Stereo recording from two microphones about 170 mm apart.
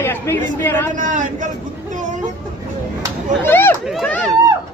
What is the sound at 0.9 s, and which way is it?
Speech, 50° right (ahead or behind).